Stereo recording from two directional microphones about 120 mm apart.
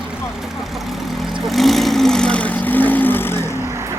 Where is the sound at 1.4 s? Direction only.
Centre (ahead or behind); by 3.5 s 20° left (ahead or behind).